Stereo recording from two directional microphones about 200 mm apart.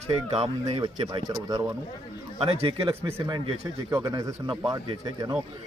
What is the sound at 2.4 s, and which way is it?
A man's voice, 30° right (ahead or behind).